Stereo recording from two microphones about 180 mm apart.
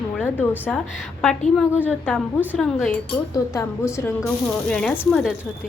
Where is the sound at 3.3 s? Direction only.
20° left (ahead or behind).